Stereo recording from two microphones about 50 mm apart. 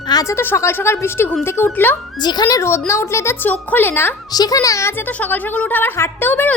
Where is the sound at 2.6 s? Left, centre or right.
Left.